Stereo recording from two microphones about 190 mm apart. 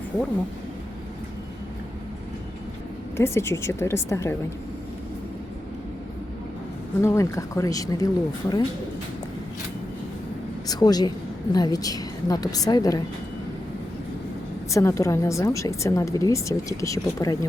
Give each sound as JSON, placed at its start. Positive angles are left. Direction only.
{"t": 3.2, "sound": "speech", "side_deg": 15}
{"t": 7.0, "sound": "speech", "side_deg": 15}
{"t": 10.7, "sound": "speech", "side_deg": 20}
{"t": 14.7, "sound": "speech", "side_deg": 15}